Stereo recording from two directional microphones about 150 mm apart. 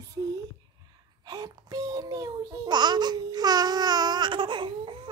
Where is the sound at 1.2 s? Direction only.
25° right (ahead or behind).